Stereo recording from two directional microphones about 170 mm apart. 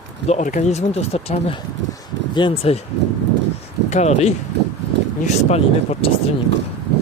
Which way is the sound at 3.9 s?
40° left (ahead or behind).